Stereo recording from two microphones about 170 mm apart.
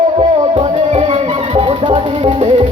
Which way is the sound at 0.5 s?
35° right (ahead or behind).